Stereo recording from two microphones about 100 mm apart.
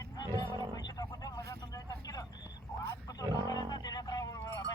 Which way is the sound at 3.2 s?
35° right (ahead or behind).